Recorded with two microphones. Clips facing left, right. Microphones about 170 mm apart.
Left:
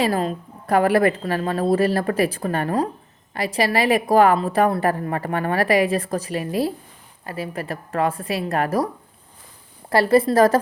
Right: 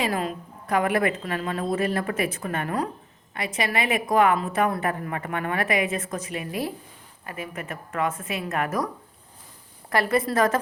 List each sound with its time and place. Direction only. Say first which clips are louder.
0.0 s a woman's voice: left 5 dB; 35° left (ahead or behind)
9.9 s a woman's voice: left 7 dB; 30° left (ahead or behind)